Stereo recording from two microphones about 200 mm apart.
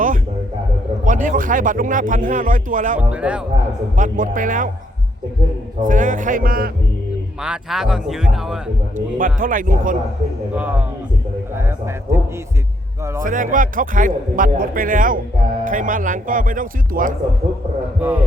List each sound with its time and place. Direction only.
1.0 s speech: 40° right (ahead or behind)
3.0 s a man's voice: 5° right (ahead or behind)
3.9 s speech: 40° right (ahead or behind)
5.8 s speech: 40° right (ahead or behind)
7.4 s speech: 5° right (ahead or behind)
9.0 s speech: 40° right (ahead or behind)
10.5 s a man's voice: 10° right (ahead or behind)
12.1 s a man's voice: 15° right (ahead or behind)
13.2 s speech: 40° right (ahead or behind)
18.0 s a man's voice: 10° right (ahead or behind)